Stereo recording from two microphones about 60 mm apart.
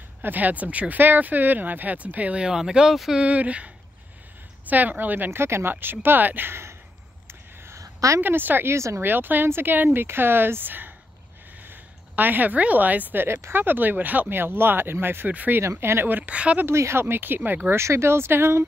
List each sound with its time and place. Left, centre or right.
0.2 s speech: right; by 3.3 s centre
3.3 s speech: right
5.4 s speech: right
7.2 s a sound: right
7.8 s a sound: right
8.2 s speech: right
8.7 s speech: right
9.0 s a woman's voice: right
13.3 s speech: right
15.6 s speech: right
16.6 s speech: right